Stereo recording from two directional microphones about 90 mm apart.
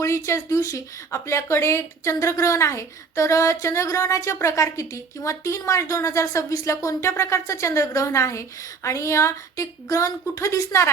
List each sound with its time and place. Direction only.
0.0 s speech: 30° left (ahead or behind)